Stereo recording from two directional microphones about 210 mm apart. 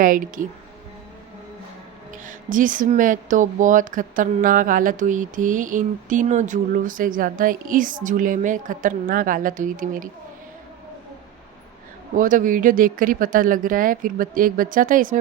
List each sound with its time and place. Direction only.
0.0 s speech: 40° right (ahead or behind)
2.2 s speech: 40° right (ahead or behind)
12.1 s speech: 40° right (ahead or behind)